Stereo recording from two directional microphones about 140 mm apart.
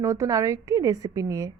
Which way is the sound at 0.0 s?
25° right (ahead or behind).